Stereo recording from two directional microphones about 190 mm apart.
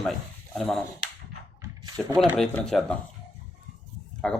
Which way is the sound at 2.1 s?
Centre (ahead or behind).